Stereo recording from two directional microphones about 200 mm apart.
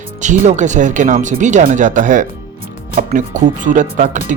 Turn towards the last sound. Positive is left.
turn(degrees=-40)  # may be behind; listen again after turning